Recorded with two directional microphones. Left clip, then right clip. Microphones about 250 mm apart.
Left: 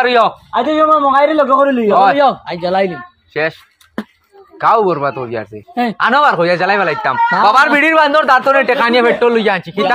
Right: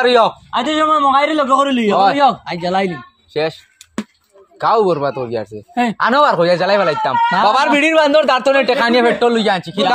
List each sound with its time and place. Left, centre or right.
0.0 s a man's voice: centre
0.5 s a man's voice: right
1.9 s a man's voice: centre
2.1 s a man's voice: right
3.3 s a man's voice: centre
4.6 s a man's voice: centre